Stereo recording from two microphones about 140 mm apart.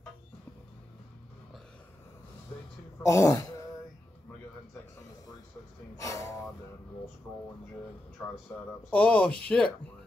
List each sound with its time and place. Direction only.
3.0 s speech: 20° left (ahead or behind)
5.9 s a sound: 25° left (ahead or behind)
8.9 s speech: 10° left (ahead or behind)